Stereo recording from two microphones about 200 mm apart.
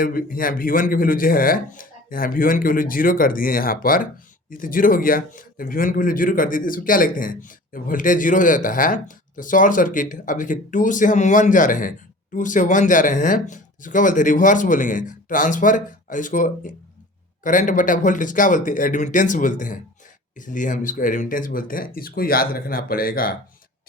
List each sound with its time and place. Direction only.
0.0 s speech: 45° left (ahead or behind)